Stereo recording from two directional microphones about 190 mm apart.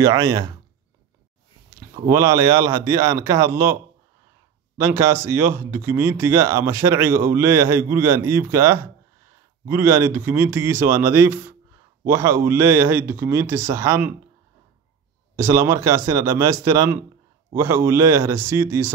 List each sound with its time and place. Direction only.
0.0 s speech: 15° right (ahead or behind)
2.0 s speech: 15° right (ahead or behind)
4.7 s speech: 15° right (ahead or behind)
15.3 s speech: 15° right (ahead or behind)